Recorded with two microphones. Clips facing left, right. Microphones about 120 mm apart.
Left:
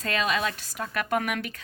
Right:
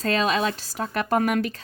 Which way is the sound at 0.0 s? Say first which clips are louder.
Right 5 dB; 30° right (ahead or behind).